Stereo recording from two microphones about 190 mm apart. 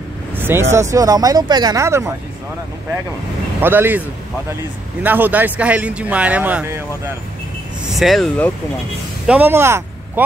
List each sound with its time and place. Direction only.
0.4 s vehicle: 10° right (ahead or behind)
0.7 s speech: 15° right (ahead or behind)
3.6 s speech: 10° right (ahead or behind)
5.0 s speech: 10° right (ahead or behind)
8.0 s speech: centre (ahead or behind)
9.3 s speech: 10° right (ahead or behind)